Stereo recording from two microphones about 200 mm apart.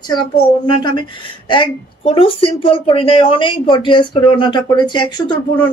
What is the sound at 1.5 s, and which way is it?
Speech, 25° left (ahead or behind).